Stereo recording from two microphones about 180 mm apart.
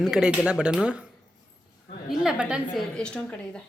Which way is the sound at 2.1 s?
5° right (ahead or behind).